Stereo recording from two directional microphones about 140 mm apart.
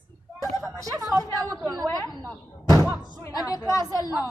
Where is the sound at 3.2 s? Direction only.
25° left (ahead or behind).